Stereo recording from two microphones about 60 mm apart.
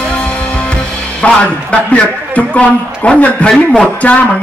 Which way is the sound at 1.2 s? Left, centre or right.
Left.